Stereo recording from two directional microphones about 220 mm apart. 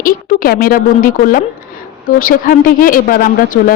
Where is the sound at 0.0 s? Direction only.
40° left (ahead or behind).